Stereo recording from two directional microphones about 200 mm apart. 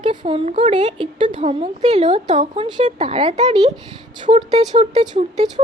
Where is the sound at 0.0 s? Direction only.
25° right (ahead or behind).